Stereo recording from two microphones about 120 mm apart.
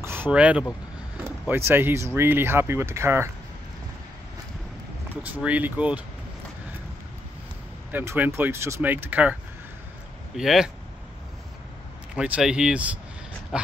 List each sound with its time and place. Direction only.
0.0 s vehicle: 20° right (ahead or behind)
0.3 s speech: 10° right (ahead or behind)
1.7 s speech: 20° right (ahead or behind)
5.2 s speech: 15° right (ahead or behind)
7.9 s speech: 20° right (ahead or behind); by 10.7 s 5° right (ahead or behind)
12.2 s speech: 5° right (ahead or behind)